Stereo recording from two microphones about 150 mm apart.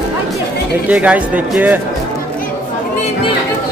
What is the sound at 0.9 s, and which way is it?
Speech, 10° right (ahead or behind).